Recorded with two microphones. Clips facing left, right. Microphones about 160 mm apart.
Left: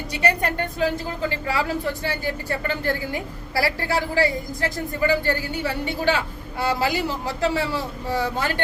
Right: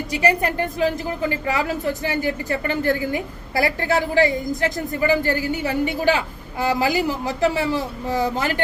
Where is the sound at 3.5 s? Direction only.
20° right (ahead or behind).